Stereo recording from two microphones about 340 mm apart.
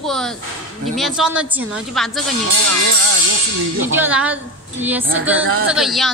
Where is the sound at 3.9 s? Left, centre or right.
Centre.